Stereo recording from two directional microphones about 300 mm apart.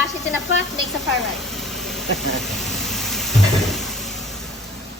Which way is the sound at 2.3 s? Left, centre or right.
Centre.